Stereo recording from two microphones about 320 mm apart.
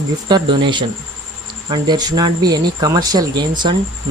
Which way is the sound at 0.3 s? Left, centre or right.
Centre.